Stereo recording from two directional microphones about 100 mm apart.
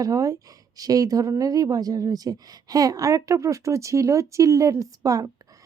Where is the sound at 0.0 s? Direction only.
35° right (ahead or behind).